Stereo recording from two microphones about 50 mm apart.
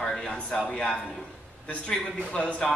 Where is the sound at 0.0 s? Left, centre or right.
Centre.